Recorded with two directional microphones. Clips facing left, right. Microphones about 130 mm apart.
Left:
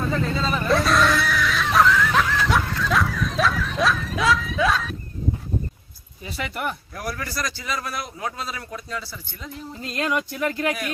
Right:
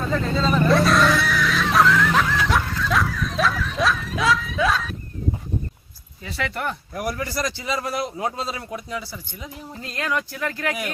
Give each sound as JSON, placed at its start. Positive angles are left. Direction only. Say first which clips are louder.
{"t": 0.1, "sound": "speech", "louder": "right 2 dB", "side_deg": 5}
{"t": 0.7, "sound": "snicker", "louder": "even", "side_deg": 0}
{"t": 6.2, "sound": "speech", "louder": "right 1 dB", "side_deg": 15}
{"t": 6.9, "sound": "speech", "louder": "right 4 dB", "side_deg": -20}
{"t": 8.9, "sound": "speech", "louder": "right 2 dB", "side_deg": -15}
{"t": 9.8, "sound": "speech", "louder": "left 1 dB", "side_deg": 20}